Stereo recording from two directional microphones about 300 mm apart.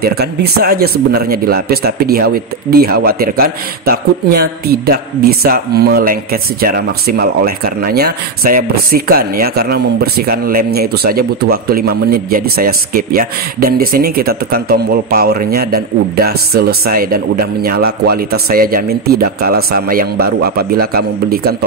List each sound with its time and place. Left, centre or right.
0.0 s speech: right